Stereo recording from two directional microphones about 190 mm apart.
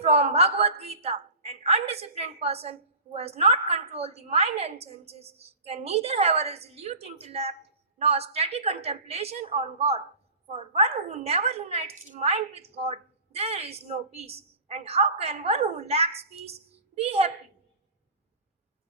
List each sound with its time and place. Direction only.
0.0 s a woman's voice: 35° right (ahead or behind)